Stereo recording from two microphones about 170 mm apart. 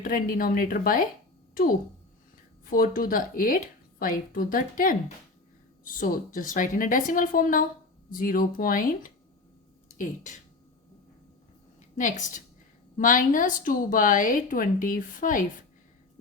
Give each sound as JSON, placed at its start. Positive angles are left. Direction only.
{"t": 0.0, "sound": "a woman's voice", "side_deg": 55}
{"t": 2.6, "sound": "a woman's voice", "side_deg": 55}
{"t": 11.9, "sound": "a woman's voice", "side_deg": 50}